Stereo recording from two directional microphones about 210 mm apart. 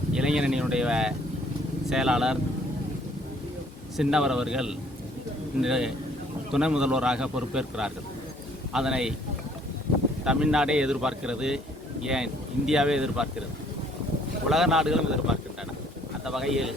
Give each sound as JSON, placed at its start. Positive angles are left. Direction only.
{"t": 0.1, "sound": "a man's voice", "side_deg": -5}
{"t": 3.9, "sound": "a man's voice", "side_deg": -5}
{"t": 10.2, "sound": "a man's voice", "side_deg": -5}
{"t": 14.5, "sound": "a man's voice", "side_deg": 0}